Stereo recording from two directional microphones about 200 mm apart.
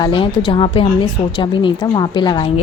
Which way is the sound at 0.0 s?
25° left (ahead or behind).